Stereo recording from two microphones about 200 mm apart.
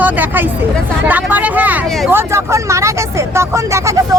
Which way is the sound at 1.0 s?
10° right (ahead or behind).